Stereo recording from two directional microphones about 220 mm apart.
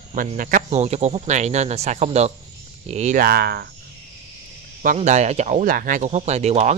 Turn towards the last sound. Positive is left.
turn(degrees=-30)  # may be behind; listen again after turning